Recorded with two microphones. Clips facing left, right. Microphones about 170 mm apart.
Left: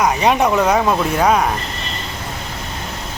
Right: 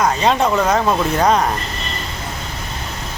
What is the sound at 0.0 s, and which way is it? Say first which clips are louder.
Speech: left 1 dB; 15° left (ahead or behind).